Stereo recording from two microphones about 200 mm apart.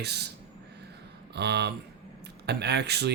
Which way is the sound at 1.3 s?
55° right (ahead or behind).